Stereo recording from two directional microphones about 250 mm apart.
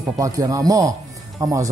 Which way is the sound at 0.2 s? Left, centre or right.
Centre.